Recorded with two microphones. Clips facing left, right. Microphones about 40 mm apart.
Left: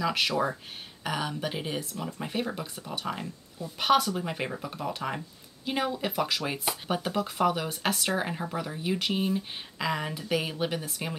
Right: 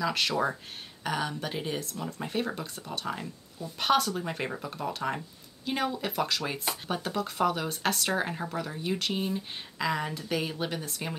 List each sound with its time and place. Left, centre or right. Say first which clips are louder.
0.0 s speech: left 1 dB; centre